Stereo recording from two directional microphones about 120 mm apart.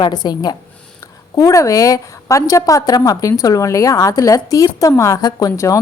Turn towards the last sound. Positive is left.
turn(degrees=25)  # may be behind; listen again after turning